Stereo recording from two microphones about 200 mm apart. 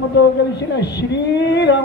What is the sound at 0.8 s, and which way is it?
Speech, 60° left (ahead or behind).